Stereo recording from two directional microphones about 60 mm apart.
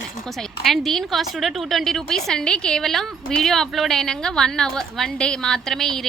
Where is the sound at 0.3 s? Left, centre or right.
Centre.